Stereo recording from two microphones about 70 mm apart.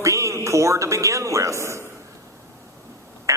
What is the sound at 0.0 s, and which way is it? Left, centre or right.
Speech, right.